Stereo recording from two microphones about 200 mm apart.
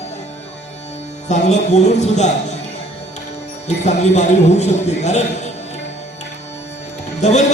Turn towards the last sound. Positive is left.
turn(degrees=35)  # may be behind; listen again after turning